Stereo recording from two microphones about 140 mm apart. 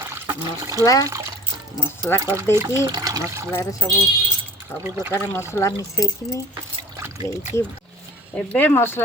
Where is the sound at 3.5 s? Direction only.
20° left (ahead or behind).